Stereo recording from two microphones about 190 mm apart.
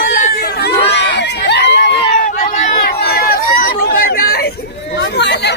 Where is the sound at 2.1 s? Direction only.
45° left (ahead or behind).